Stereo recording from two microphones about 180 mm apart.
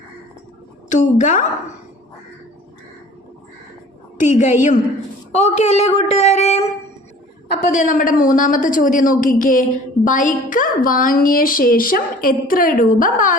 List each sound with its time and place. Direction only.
0.9 s a man's voice: 45° left (ahead or behind)
4.2 s a man's voice: 45° left (ahead or behind)